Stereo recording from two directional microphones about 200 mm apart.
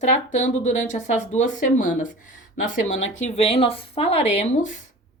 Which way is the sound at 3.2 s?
30° left (ahead or behind).